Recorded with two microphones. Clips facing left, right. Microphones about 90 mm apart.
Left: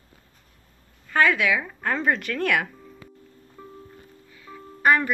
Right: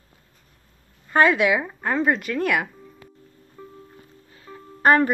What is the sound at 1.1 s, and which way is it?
Speech, 25° right (ahead or behind).